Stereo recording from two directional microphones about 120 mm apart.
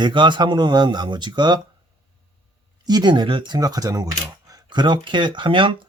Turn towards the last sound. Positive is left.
turn(degrees=-45)  # may be behind; listen again after turning